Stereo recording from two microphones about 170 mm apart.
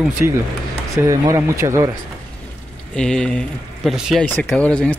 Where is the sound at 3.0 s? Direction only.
5° left (ahead or behind).